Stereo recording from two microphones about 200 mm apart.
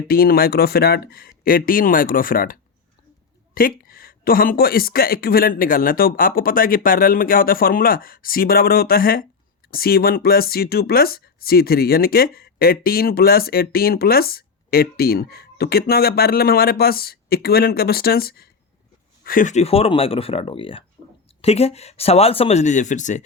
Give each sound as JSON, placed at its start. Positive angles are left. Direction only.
{"t": 0.1, "sound": "speech", "side_deg": 50}